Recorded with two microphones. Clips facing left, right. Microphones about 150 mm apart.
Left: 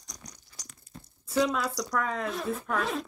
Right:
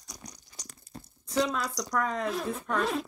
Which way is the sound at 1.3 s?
5° left (ahead or behind).